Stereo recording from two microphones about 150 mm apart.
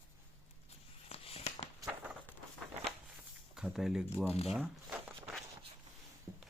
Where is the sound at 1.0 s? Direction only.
40° left (ahead or behind).